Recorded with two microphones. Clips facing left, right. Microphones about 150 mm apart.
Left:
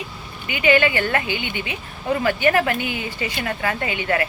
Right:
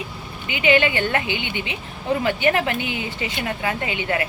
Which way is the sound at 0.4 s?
20° right (ahead or behind).